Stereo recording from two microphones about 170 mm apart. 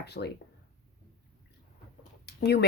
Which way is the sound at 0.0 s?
75° left (ahead or behind).